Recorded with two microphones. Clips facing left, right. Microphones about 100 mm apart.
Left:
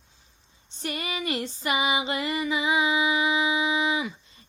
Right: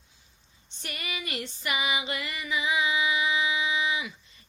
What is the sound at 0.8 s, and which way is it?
Female singing, 30° left (ahead or behind).